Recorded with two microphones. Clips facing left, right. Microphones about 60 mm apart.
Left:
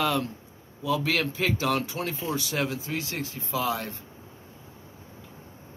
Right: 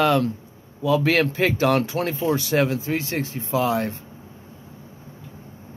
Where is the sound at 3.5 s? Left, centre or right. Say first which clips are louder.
Right 7 dB; right.